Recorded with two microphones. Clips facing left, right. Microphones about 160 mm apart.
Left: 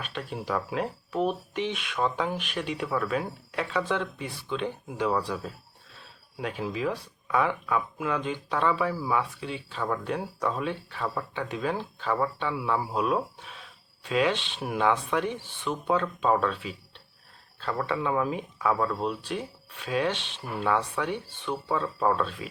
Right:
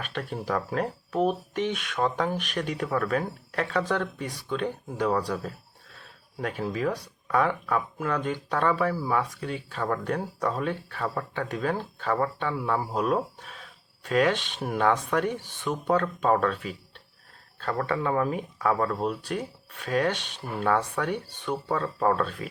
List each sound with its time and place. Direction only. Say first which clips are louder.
0.0 s speech: right 2 dB; 50° right (ahead or behind)